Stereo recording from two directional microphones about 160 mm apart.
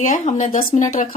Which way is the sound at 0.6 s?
60° left (ahead or behind).